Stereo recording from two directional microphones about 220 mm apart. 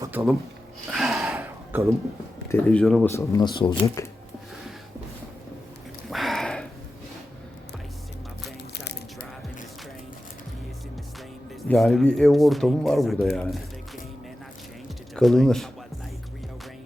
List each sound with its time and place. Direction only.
0.0 s speech: 10° right (ahead or behind)
0.9 s gasp: centre (ahead or behind)
2.5 s speech: 5° left (ahead or behind)
3.1 s speech: 15° left (ahead or behind)
6.1 s a sound: centre (ahead or behind)
11.7 s speech: centre (ahead or behind)
15.1 s speech: centre (ahead or behind)